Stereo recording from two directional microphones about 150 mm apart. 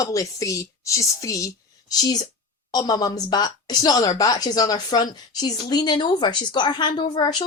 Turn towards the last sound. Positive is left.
turn(degrees=30)  # may be behind; listen again after turning